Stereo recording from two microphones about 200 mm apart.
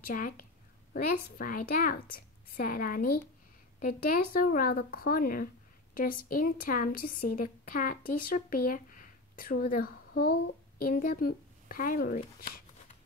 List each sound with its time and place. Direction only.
0.0 s a woman's voice: 45° left (ahead or behind)